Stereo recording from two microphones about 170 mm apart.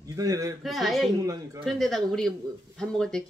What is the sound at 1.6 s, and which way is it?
Speech, centre (ahead or behind).